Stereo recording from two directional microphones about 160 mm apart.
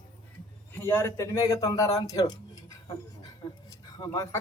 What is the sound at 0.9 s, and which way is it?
Speech, 15° left (ahead or behind).